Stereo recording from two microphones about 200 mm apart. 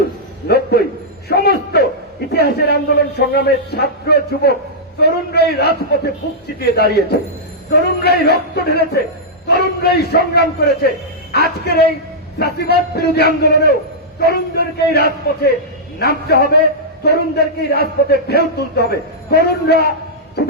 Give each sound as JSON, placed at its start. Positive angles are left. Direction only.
{"t": 0.4, "sound": "a sound", "side_deg": 50}
{"t": 2.3, "sound": "a man's voice", "side_deg": 55}
{"t": 14.8, "sound": "a man's voice", "side_deg": 55}